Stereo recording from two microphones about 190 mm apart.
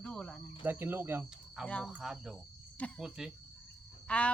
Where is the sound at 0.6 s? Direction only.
10° right (ahead or behind).